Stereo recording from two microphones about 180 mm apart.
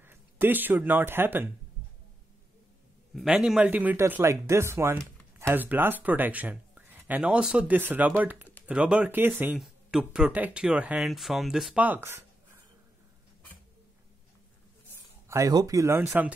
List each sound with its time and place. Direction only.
0.0 s speech: 10° right (ahead or behind)
3.2 s speech: 5° right (ahead or behind)
15.2 s speech: 15° right (ahead or behind)